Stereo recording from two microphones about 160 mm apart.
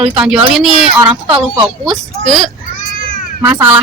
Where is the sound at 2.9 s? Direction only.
55° left (ahead or behind).